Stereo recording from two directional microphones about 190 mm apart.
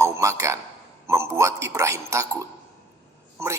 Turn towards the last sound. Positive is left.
turn(degrees=-15)  # may be behind; listen again after turning